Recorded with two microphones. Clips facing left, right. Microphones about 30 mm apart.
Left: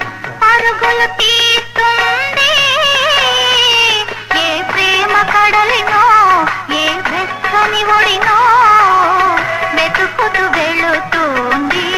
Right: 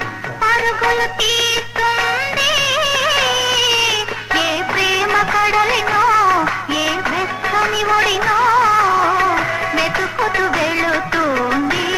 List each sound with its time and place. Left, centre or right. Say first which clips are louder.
0.4 s music: left 5 dB; centre
5.4 s music of bollywood: left 5 dB; left
7.5 s music: left 5 dB; left